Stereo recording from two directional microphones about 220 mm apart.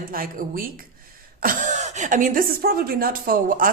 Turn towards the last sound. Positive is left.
turn(degrees=-40)  # may be behind; listen again after turning